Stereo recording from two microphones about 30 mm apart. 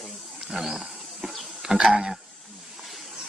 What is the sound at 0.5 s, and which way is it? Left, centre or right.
Wild animals, centre.